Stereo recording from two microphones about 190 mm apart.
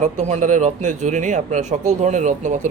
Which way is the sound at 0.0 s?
40° right (ahead or behind).